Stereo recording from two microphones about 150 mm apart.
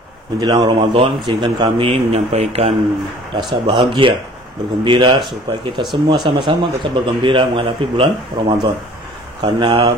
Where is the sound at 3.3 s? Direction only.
30° right (ahead or behind).